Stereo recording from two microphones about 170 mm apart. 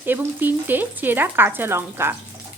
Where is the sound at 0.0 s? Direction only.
10° right (ahead or behind).